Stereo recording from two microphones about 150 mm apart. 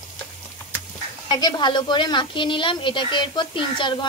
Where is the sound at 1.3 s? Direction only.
30° left (ahead or behind).